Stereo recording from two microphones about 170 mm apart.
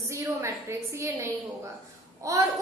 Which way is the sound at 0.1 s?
15° right (ahead or behind).